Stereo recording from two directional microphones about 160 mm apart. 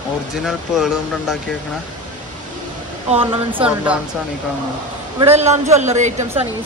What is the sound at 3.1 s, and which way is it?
Speech, 35° right (ahead or behind).